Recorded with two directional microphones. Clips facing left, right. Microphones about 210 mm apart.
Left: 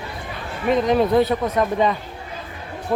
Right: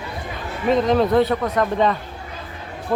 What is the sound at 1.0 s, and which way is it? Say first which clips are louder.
Speech: even; 10° left (ahead or behind).